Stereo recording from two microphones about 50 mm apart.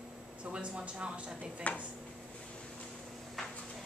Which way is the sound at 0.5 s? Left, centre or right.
Right.